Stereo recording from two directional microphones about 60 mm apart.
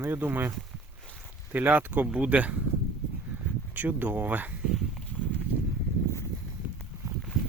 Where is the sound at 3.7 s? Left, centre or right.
Right.